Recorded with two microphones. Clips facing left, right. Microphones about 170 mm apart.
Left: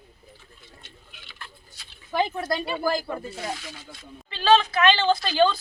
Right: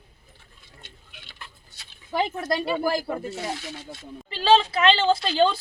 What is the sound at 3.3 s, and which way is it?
Speech, 25° right (ahead or behind).